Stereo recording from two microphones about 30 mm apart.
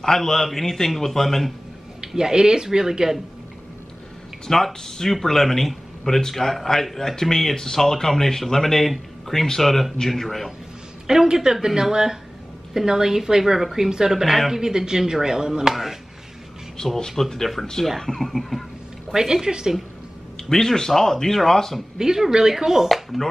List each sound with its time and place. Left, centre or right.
0.0 s speech: centre
2.0 s speech: right
4.5 s speech: centre
11.1 s a woman's voice: centre
14.1 s a woman's voice: centre
14.5 s speech: centre
15.7 s speech: centre
16.7 s speech: centre
19.1 s speech: centre
20.4 s speech: centre
21.9 s speech: centre